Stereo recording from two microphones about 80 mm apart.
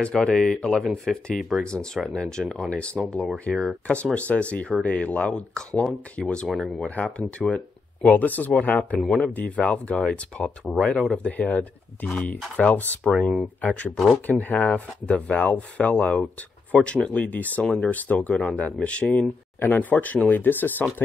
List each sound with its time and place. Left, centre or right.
0.0 s speech: centre
6.2 s speech: centre
13.9 s speech: centre
14.4 s speech: centre